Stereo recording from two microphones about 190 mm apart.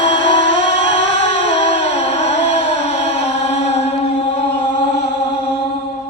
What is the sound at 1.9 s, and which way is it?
Music, 35° left (ahead or behind).